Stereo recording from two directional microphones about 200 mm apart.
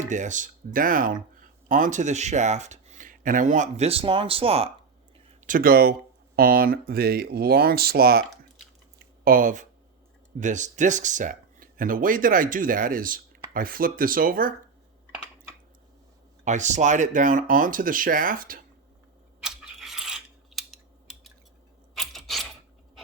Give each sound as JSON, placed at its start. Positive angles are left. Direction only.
{"t": 0.1, "sound": "speech", "side_deg": -40}
{"t": 5.5, "sound": "speech", "side_deg": -45}
{"t": 9.2, "sound": "speech", "side_deg": -45}
{"t": 16.4, "sound": "speech", "side_deg": -35}
{"t": 19.4, "sound": "scissors", "side_deg": 0}
{"t": 21.9, "sound": "a sound", "side_deg": 0}